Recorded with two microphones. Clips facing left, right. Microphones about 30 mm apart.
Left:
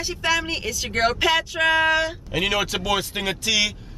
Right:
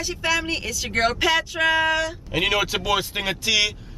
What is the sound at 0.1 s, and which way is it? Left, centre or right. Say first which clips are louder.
Speech: left 1 dB; centre.